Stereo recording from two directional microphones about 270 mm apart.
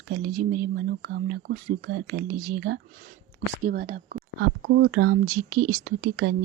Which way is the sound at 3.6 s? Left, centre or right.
Right.